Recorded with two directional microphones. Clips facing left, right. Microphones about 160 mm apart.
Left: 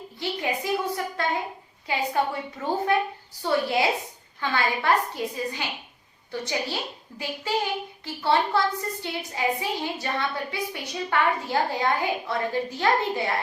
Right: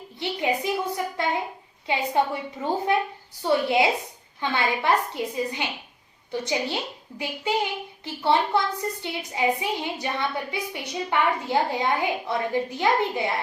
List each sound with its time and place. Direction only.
0.2 s a woman's voice: 20° right (ahead or behind)